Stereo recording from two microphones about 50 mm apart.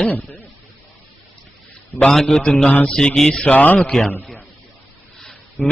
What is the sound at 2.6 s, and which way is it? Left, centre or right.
Speech, left.